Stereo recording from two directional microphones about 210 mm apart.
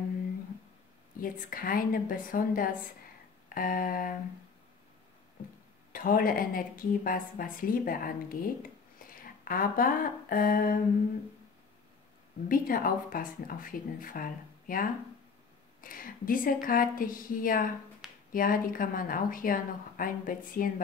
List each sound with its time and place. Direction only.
1.2 s speech: 40° left (ahead or behind)
5.9 s a woman's voice: 40° left (ahead or behind)
12.4 s speech: 40° left (ahead or behind)